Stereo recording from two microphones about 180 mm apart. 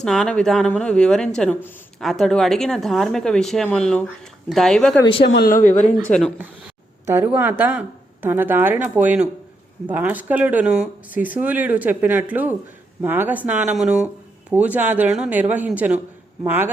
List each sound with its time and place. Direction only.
0.0 s speech: 5° left (ahead or behind)
5.2 s speech: 65° left (ahead or behind); by 5.9 s 45° left (ahead or behind)
6.1 s speech: 5° left (ahead or behind)
7.0 s speech: 15° right (ahead or behind)